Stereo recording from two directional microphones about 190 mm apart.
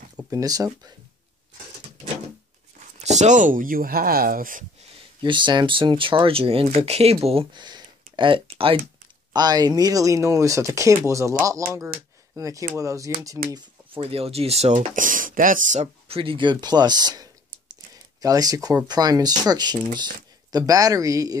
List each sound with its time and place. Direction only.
0.3 s speech: 20° right (ahead or behind)
3.0 s speech: 35° right (ahead or behind)
5.2 s speech: 25° right (ahead or behind)